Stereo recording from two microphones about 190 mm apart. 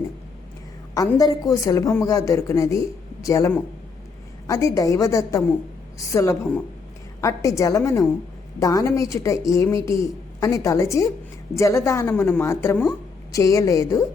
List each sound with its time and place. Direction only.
0.9 s speech: 20° left (ahead or behind)